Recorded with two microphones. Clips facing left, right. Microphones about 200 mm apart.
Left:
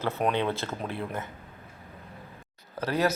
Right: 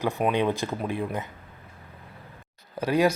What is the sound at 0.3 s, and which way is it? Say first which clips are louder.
Speech: right 4 dB; 15° right (ahead or behind).